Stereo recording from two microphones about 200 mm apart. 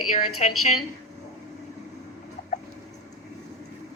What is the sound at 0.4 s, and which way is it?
Speech, 35° left (ahead or behind).